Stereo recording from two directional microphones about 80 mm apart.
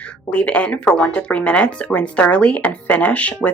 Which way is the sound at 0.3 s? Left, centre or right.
Centre.